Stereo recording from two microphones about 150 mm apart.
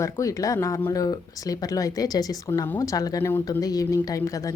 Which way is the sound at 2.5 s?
15° left (ahead or behind).